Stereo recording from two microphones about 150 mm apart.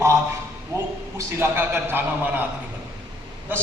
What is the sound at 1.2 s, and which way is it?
A man's voice, 15° right (ahead or behind).